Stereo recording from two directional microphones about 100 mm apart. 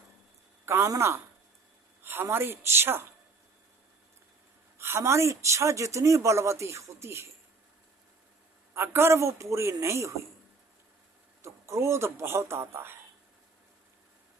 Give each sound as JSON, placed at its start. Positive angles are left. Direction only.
{"t": 0.6, "sound": "speech", "side_deg": -25}
{"t": 4.8, "sound": "speech", "side_deg": -25}
{"t": 8.7, "sound": "speech", "side_deg": -25}
{"t": 11.4, "sound": "speech", "side_deg": -30}